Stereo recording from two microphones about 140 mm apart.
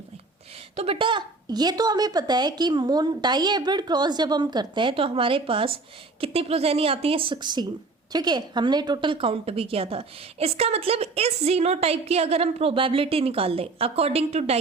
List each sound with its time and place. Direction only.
0.8 s a woman's voice: 40° right (ahead or behind)